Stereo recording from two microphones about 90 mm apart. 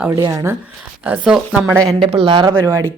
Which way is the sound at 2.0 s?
75° right (ahead or behind).